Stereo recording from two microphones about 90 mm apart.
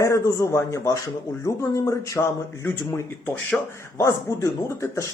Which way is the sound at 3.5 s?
10° left (ahead or behind).